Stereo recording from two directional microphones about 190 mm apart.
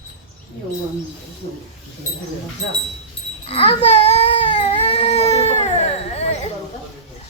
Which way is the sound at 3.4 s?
30° left (ahead or behind).